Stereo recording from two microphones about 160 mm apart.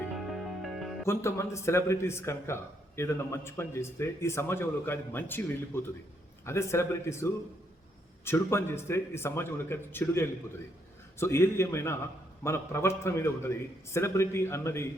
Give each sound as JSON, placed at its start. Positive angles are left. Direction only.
{"t": 0.1, "sound": "music", "side_deg": 0}
{"t": 1.0, "sound": "a man's voice", "side_deg": 15}